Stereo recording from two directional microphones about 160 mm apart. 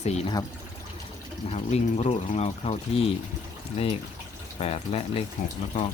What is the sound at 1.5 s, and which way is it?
Speech, 40° left (ahead or behind).